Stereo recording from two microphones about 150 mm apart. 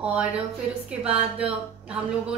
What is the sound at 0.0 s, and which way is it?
A woman's voice, 5° right (ahead or behind).